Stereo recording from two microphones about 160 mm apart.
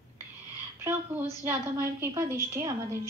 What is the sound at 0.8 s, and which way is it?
A woman's voice, 15° right (ahead or behind).